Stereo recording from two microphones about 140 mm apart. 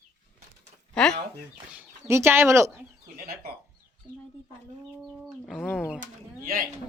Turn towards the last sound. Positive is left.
turn(degrees=-90)